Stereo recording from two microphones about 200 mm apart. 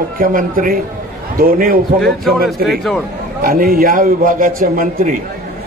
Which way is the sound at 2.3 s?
50° right (ahead or behind).